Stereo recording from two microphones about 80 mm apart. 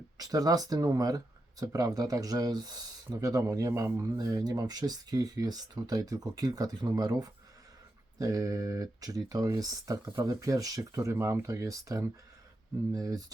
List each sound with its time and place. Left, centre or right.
0.2 s speech: right
3.1 s speech: right
4.2 s speech: right